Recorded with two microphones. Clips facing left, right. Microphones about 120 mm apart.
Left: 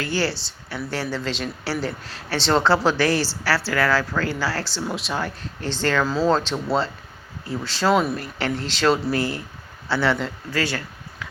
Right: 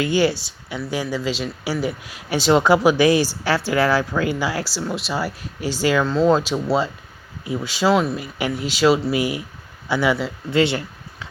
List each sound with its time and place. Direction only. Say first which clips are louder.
0.0 s speech: right 6 dB; 15° right (ahead or behind)
4.8 s speech: right 1 dB; centre (ahead or behind)
6.1 s speech: right 5 dB; 5° left (ahead or behind)
6.3 s speech: right 3 dB; 10° right (ahead or behind)
10.5 s a sound: right 8 dB; 20° right (ahead or behind)